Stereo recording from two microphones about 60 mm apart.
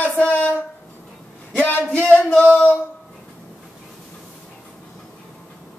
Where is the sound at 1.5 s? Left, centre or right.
Left.